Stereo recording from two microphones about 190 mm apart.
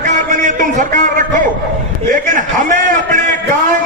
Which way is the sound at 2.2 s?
45° right (ahead or behind).